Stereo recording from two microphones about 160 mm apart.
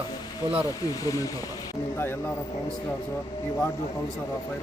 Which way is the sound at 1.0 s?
20° left (ahead or behind).